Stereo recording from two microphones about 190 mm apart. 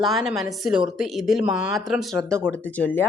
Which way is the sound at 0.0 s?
Centre (ahead or behind).